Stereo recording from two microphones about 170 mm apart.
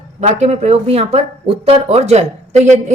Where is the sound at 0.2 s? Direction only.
40° right (ahead or behind).